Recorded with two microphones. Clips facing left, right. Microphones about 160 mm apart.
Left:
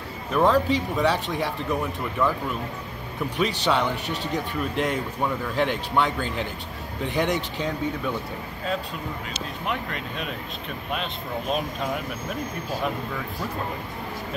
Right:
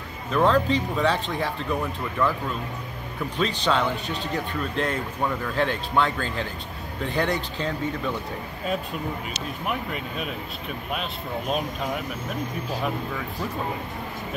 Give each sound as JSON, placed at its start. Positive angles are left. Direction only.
{"t": 0.3, "sound": "speech", "side_deg": 10}
{"t": 3.3, "sound": "speech", "side_deg": 15}
{"t": 9.7, "sound": "speech", "side_deg": -5}